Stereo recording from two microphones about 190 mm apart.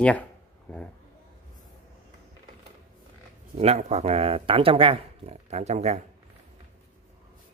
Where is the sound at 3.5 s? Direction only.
35° right (ahead or behind).